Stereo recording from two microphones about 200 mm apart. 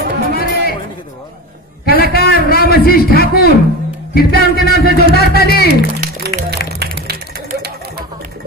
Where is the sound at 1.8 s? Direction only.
50° left (ahead or behind).